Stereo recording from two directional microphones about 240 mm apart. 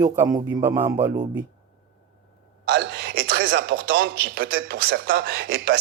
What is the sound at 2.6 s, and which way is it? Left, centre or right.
A man's voice, right.